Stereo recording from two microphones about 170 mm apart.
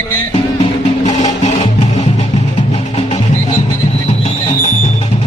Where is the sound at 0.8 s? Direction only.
45° left (ahead or behind).